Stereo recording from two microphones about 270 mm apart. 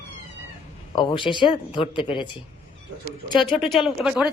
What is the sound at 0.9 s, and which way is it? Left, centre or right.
Speech, centre.